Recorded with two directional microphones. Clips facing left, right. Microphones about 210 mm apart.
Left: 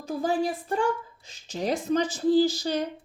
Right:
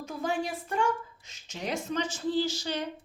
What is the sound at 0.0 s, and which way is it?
Speech, 35° left (ahead or behind).